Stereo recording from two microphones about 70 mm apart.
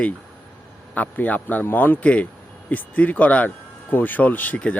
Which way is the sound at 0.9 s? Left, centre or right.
Left.